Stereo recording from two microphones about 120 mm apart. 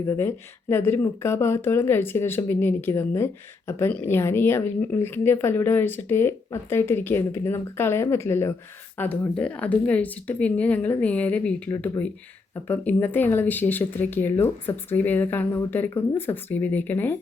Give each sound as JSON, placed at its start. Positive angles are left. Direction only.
{"t": 0.1, "sound": "speech", "side_deg": 20}